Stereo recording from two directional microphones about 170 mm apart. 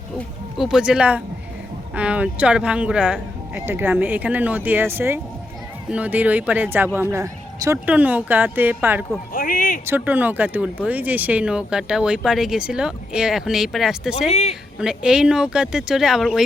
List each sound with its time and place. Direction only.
0.5 s speech: centre (ahead or behind)
9.3 s speech: 55° left (ahead or behind)
9.8 s speech: 10° right (ahead or behind)
14.3 s a woman's voice: 40° left (ahead or behind)
14.8 s speech: 5° right (ahead or behind)